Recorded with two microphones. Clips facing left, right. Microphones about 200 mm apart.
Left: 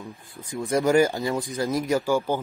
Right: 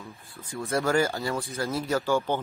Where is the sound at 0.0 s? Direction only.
15° left (ahead or behind).